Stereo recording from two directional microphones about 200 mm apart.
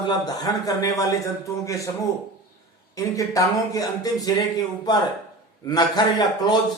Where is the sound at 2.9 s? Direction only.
15° left (ahead or behind).